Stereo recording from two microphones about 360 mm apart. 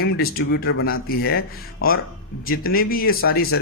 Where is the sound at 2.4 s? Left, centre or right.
Left.